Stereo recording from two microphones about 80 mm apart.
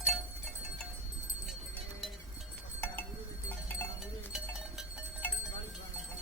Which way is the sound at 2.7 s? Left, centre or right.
Left.